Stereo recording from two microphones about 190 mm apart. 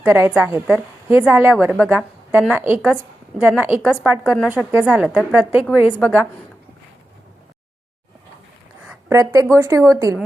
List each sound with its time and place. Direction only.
0.0 s a woman's voice: 10° right (ahead or behind)
6.0 s a woman's voice: 5° left (ahead or behind)
8.9 s a woman's voice: 15° right (ahead or behind)